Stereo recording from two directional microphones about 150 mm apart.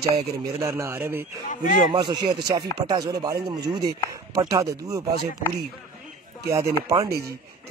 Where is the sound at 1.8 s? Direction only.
25° right (ahead or behind).